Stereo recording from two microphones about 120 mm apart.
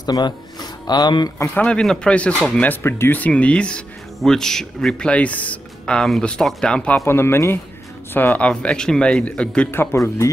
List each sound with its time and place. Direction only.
0.0 s speech: 35° left (ahead or behind)
1.5 s speech: 10° left (ahead or behind)
7.1 s speech: 20° left (ahead or behind)
9.7 s speech: 20° left (ahead or behind)